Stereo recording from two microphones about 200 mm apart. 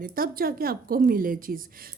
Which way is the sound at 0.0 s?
45° right (ahead or behind).